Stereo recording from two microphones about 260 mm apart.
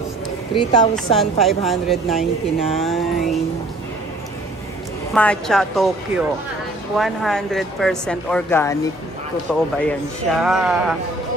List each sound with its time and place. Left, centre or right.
0.6 s speech: centre
0.9 s speech: centre
5.1 s speech: centre